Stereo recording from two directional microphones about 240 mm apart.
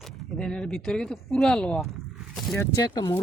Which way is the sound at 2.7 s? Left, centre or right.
Centre.